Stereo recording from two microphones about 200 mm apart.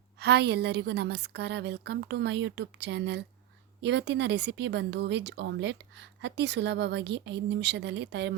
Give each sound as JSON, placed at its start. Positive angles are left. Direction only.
{"t": 0.2, "sound": "speech", "side_deg": -55}